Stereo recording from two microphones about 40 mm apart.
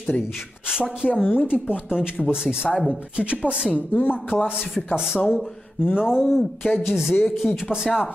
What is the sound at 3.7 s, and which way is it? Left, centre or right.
Speech, left.